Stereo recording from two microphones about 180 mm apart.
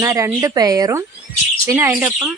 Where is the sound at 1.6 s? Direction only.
15° right (ahead or behind).